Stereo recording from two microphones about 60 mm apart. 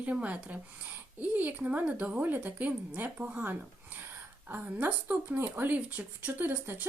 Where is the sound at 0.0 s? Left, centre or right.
Right.